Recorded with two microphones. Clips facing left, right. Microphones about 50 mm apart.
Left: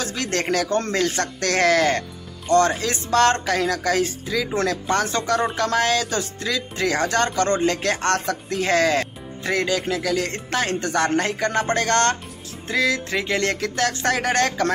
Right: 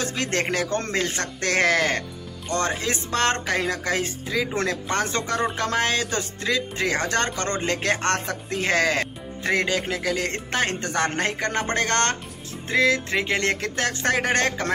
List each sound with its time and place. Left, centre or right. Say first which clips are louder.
0.0 s music: even; right
5.6 s speech: left 3 dB; right
12.6 s music: right 1 dB; right